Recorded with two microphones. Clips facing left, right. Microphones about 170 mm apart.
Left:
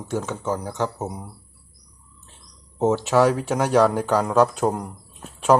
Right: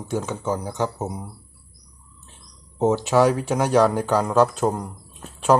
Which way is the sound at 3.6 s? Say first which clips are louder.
Even; 5° left (ahead or behind).